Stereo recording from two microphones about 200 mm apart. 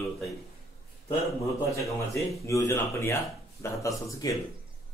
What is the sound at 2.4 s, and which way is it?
Speech, 15° left (ahead or behind).